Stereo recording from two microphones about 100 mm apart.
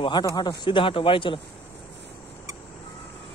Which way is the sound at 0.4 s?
50° left (ahead or behind).